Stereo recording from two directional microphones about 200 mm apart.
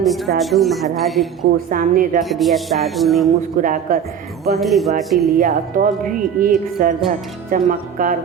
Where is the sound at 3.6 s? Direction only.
40° right (ahead or behind).